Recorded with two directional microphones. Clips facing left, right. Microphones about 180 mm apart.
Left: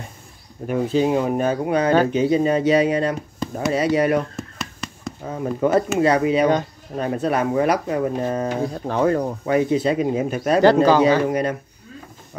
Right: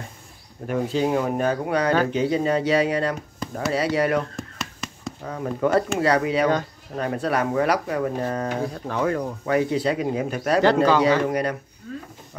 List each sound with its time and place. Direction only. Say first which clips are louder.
0.7 s speech: left 3 dB; 15° left (ahead or behind)
4.4 s a sound: left 2 dB; centre (ahead or behind)
5.2 s speech: left 3 dB; 20° left (ahead or behind)
9.5 s speech: left 3 dB; 20° left (ahead or behind)